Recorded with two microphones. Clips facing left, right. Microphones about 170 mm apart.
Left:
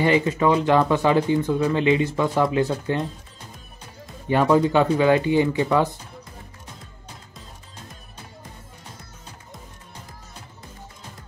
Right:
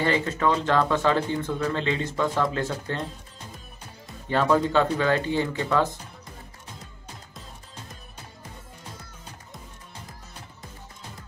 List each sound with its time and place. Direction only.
0.0 s speech: 15° left (ahead or behind)
4.3 s speech: 15° left (ahead or behind)